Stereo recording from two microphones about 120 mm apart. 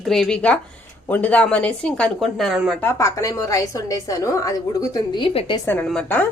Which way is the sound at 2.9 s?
25° left (ahead or behind).